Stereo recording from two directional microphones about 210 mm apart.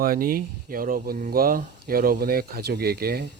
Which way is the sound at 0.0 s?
45° right (ahead or behind).